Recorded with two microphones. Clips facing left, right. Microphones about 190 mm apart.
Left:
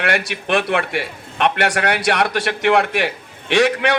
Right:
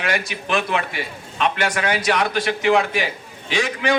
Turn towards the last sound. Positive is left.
turn(degrees=65)  # may be behind; listen again after turning